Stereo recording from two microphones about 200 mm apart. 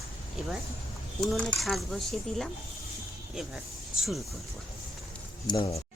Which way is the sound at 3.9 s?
Centre (ahead or behind).